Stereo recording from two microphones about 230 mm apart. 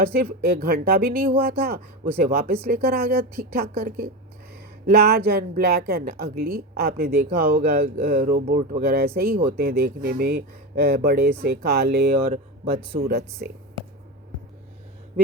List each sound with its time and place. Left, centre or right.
0.1 s a woman's voice: right
12.3 s speech: right
13.4 s a woman's voice: right